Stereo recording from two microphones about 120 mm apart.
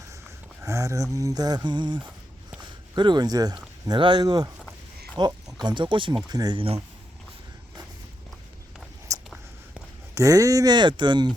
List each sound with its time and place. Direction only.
0.6 s speech: 25° right (ahead or behind)
9.1 s a sound: 25° right (ahead or behind)
10.2 s speech: 30° right (ahead or behind)